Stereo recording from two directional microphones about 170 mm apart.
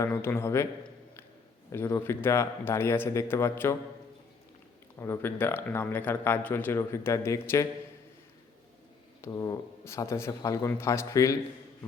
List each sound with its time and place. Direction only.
0.0 s a man's voice: 15° left (ahead or behind)
1.7 s a man's voice: 15° left (ahead or behind)
4.9 s a man's voice: 15° left (ahead or behind)
9.2 s a man's voice: 20° left (ahead or behind)